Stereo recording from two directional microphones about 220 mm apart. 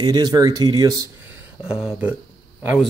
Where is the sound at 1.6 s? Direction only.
5° right (ahead or behind).